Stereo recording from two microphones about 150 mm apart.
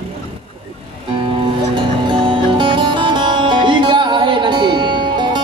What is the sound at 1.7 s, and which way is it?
Music, 35° right (ahead or behind).